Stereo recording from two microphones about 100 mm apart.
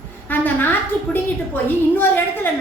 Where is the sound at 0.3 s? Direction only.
20° left (ahead or behind).